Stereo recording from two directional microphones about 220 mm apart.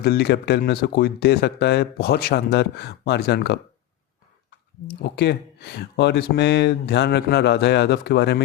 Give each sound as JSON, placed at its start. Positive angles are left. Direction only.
{"t": 0.0, "sound": "speech", "side_deg": 50}
{"t": 4.9, "sound": "speech", "side_deg": 50}